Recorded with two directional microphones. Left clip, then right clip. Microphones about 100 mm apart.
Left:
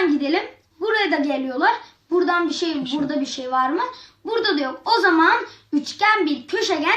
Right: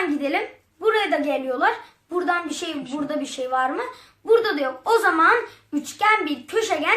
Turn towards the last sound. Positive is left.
turn(degrees=-30)  # may be behind; listen again after turning